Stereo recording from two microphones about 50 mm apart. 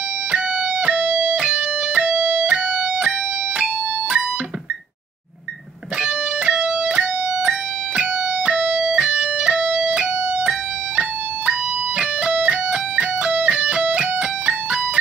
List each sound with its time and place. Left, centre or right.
0.3 s music: right
6.0 s music: right
12.0 s music: right